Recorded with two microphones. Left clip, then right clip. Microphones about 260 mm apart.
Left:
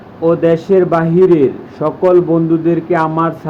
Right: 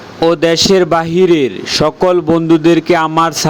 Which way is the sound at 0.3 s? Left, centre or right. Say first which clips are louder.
Right 1 dB; right.